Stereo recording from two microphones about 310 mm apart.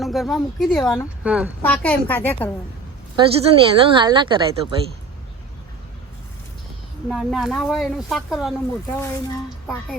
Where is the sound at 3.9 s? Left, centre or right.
Centre.